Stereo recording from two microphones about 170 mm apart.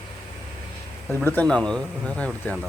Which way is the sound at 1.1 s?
10° left (ahead or behind).